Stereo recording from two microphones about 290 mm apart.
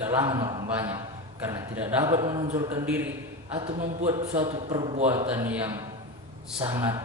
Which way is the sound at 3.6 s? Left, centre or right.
Right.